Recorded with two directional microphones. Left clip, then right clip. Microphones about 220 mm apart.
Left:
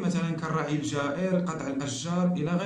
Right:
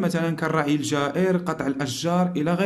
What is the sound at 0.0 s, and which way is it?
Speech, 40° right (ahead or behind).